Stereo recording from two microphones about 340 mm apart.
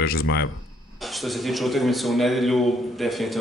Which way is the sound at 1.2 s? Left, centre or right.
Centre.